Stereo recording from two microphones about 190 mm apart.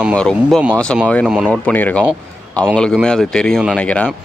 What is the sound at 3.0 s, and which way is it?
Speech, 5° left (ahead or behind).